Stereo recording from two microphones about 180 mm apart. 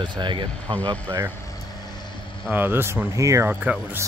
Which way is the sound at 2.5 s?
10° right (ahead or behind).